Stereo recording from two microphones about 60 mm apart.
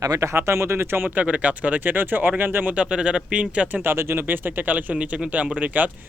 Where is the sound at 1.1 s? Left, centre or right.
Right.